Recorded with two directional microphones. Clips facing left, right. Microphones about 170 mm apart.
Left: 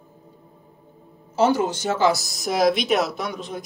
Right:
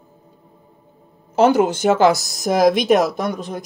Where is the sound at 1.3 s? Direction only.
60° right (ahead or behind).